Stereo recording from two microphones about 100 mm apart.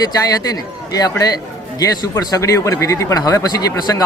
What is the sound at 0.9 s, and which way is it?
Speech, 40° left (ahead or behind).